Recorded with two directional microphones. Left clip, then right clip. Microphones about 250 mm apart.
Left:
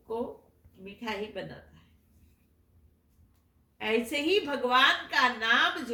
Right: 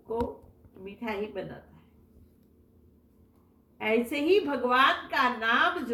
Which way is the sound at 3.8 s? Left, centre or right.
Centre.